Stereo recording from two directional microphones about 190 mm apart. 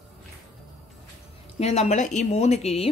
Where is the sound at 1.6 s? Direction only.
35° left (ahead or behind).